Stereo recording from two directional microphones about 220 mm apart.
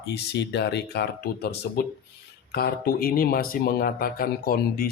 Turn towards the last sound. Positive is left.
turn(degrees=40)  # may be behind; listen again after turning